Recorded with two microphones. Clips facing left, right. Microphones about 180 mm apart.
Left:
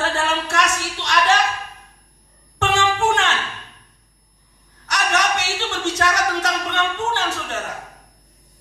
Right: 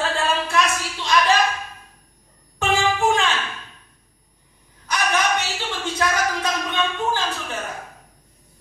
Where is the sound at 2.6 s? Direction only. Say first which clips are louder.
Left 1 dB; 80° left.